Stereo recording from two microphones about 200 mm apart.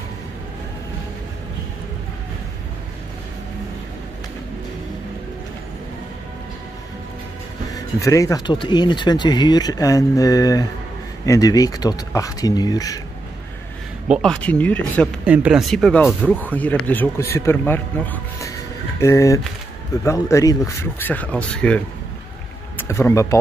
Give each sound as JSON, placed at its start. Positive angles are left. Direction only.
{"t": 7.7, "sound": "speech", "side_deg": 15}
{"t": 14.0, "sound": "speech", "side_deg": -5}
{"t": 14.4, "sound": "speech", "side_deg": 5}
{"t": 15.2, "sound": "speech", "side_deg": -5}